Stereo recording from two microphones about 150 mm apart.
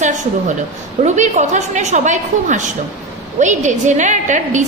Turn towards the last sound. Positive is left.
turn(degrees=-55)  # may be behind; listen again after turning